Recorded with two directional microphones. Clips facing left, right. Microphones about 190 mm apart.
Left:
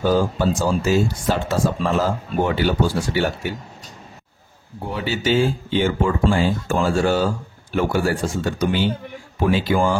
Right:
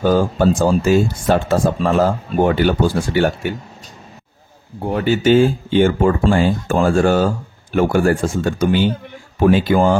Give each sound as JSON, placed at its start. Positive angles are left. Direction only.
{"t": 0.1, "sound": "speech", "side_deg": -55}
{"t": 4.8, "sound": "speech", "side_deg": -50}